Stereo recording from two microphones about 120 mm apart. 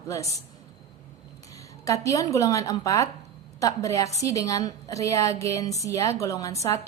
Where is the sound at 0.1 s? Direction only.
25° left (ahead or behind).